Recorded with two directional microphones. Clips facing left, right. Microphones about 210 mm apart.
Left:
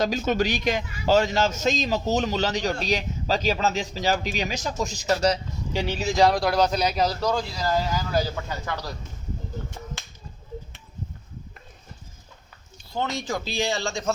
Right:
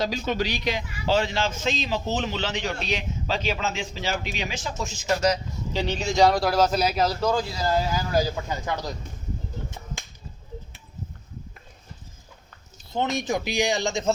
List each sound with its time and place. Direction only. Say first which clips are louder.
0.0 s a man's voice: left 3 dB; 50° left (ahead or behind)
5.7 s a man's voice: even; 10° left (ahead or behind)
8.1 s speech: right 3 dB; 15° right (ahead or behind)
12.9 s speech: right 3 dB; 20° right (ahead or behind)